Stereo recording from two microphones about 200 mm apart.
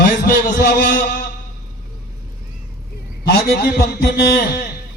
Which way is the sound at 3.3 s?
55° left (ahead or behind).